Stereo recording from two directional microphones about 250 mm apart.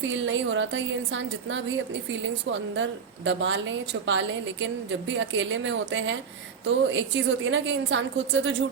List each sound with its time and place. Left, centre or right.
0.0 s a woman's voice: right